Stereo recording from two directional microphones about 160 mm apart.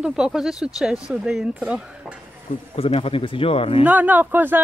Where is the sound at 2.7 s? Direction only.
35° left (ahead or behind).